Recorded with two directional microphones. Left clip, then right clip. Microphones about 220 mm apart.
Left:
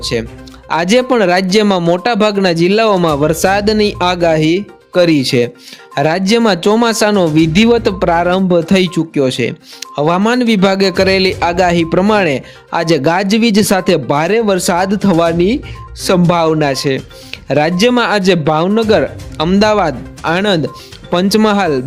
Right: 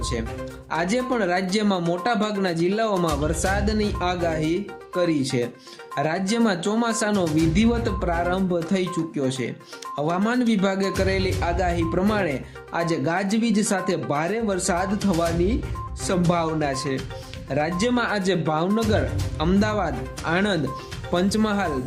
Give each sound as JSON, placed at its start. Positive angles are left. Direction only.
{"t": 0.0, "sound": "speech", "side_deg": 35}